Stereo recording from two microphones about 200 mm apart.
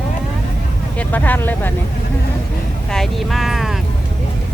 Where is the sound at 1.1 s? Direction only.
10° left (ahead or behind).